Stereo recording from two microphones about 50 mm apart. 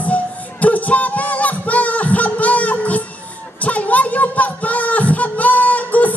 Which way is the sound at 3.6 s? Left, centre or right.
Left.